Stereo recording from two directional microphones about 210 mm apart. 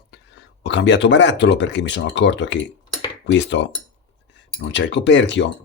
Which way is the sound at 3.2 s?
60° left (ahead or behind).